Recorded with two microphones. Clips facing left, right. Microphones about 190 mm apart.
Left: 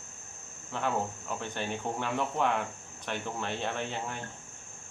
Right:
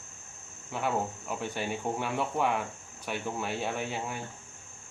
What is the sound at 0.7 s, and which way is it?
Speech, 10° right (ahead or behind).